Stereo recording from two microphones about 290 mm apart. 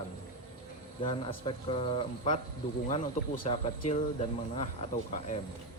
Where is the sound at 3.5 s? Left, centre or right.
Left.